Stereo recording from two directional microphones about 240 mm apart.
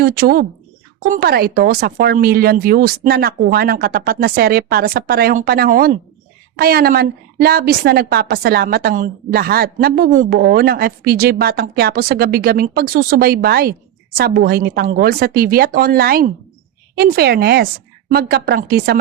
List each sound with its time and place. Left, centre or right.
0.0 s a woman's voice: right